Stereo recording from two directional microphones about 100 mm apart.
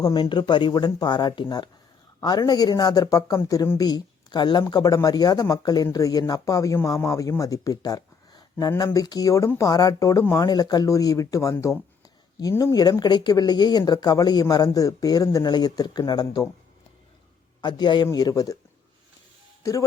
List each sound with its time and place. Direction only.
0.0 s speech: 45° left (ahead or behind)
17.6 s speech: 50° left (ahead or behind)